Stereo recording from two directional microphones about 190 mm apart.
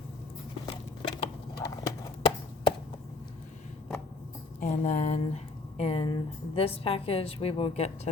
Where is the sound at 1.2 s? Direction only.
20° left (ahead or behind).